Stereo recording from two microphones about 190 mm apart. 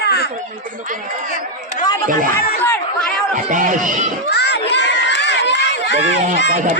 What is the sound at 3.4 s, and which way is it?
Speech, 45° right (ahead or behind).